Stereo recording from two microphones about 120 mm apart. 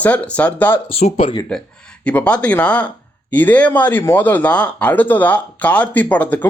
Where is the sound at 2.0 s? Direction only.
10° left (ahead or behind).